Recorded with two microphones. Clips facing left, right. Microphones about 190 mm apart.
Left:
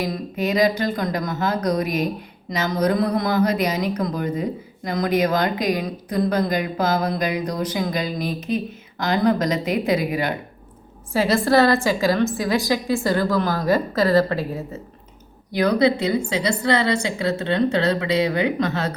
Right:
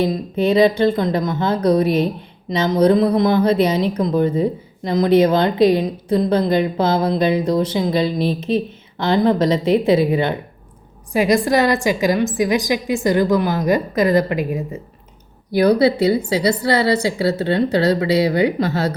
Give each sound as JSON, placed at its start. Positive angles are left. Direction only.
{"t": 0.0, "sound": "speech", "side_deg": -30}
{"t": 11.1, "sound": "a woman's voice", "side_deg": -15}
{"t": 15.5, "sound": "a woman's voice", "side_deg": -35}